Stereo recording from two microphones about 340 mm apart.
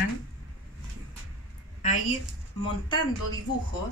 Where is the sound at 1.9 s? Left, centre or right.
Left.